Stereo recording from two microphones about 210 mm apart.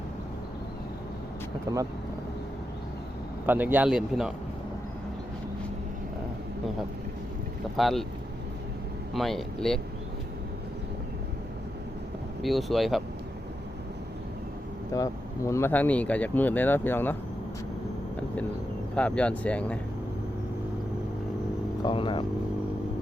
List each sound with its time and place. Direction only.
1.7 s speech: 15° right (ahead or behind)
3.4 s a man's voice: 10° right (ahead or behind)
7.8 s a man's voice: centre (ahead or behind)
9.1 s a man's voice: centre (ahead or behind)
12.4 s a man's voice: centre (ahead or behind)
14.9 s speech: 15° left (ahead or behind)
18.9 s a man's voice: 5° left (ahead or behind)
21.8 s speech: 25° left (ahead or behind)